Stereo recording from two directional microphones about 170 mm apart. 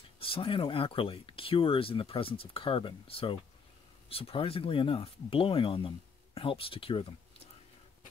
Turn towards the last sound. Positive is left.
turn(degrees=35)  # may be behind; listen again after turning